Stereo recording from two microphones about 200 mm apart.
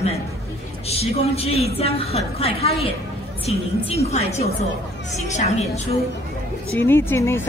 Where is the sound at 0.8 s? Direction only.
30° left (ahead or behind).